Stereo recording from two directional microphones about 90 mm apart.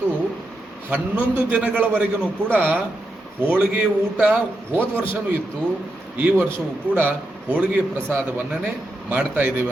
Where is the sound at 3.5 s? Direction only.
15° right (ahead or behind).